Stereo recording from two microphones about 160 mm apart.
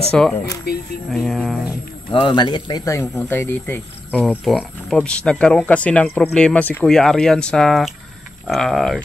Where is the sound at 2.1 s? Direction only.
30° left (ahead or behind).